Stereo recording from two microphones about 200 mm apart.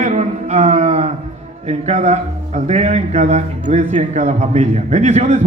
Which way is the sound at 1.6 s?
35° right (ahead or behind).